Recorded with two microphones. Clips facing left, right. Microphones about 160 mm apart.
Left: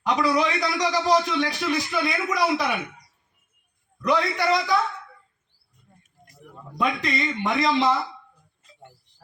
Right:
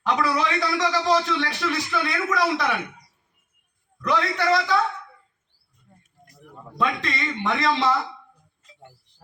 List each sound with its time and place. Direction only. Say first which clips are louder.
0.0 s a man's voice: left 1 dB; 15° left (ahead or behind)
4.0 s a man's voice: left 1 dB; 15° left (ahead or behind)
6.7 s a man's voice: left 1 dB; 15° left (ahead or behind)